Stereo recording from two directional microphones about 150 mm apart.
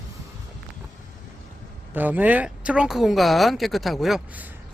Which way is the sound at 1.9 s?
10° right (ahead or behind).